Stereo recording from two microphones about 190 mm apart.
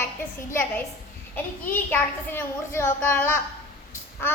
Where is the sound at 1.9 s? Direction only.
10° left (ahead or behind).